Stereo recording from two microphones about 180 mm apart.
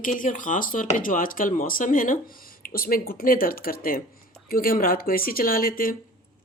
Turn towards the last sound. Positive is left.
turn(degrees=50)  # may be behind; listen again after turning